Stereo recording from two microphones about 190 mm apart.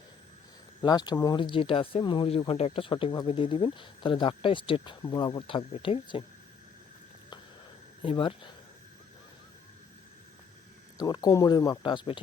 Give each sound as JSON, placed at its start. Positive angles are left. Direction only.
{"t": 0.8, "sound": "speech", "side_deg": 20}
{"t": 8.0, "sound": "speech", "side_deg": 25}
{"t": 10.9, "sound": "speech", "side_deg": 20}